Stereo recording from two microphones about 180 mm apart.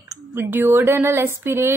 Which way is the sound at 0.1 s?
15° right (ahead or behind).